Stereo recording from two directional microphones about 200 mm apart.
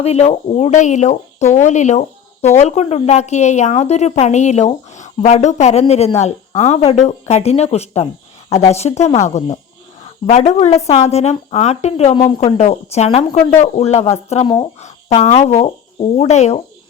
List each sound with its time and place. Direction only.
0.0 s speech: 30° left (ahead or behind)